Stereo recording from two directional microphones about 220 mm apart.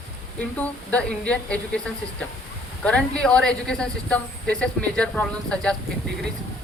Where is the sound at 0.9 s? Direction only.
5° left (ahead or behind).